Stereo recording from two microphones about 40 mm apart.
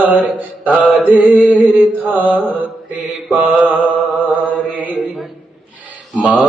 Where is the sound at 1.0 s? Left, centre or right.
Right.